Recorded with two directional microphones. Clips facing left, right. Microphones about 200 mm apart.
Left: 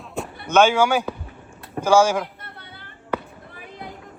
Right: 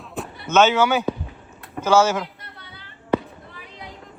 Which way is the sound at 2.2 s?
50° left (ahead or behind).